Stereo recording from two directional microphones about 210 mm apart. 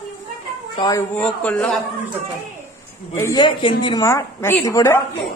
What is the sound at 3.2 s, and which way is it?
A woman's voice, 20° left (ahead or behind).